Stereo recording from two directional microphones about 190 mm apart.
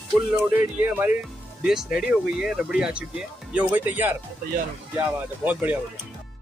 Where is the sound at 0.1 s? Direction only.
Centre (ahead or behind).